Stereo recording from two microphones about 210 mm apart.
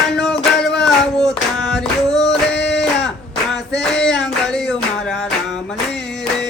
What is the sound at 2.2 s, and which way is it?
Music, 55° left (ahead or behind).